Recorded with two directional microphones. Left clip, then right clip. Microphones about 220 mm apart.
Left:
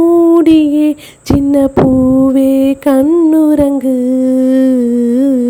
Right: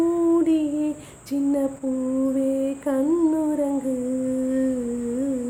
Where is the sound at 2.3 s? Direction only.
45° left (ahead or behind).